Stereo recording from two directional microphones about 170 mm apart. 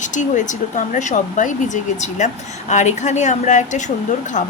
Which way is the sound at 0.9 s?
45° left (ahead or behind).